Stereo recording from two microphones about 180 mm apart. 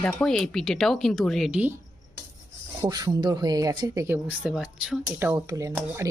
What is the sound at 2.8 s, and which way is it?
Speech, 20° right (ahead or behind).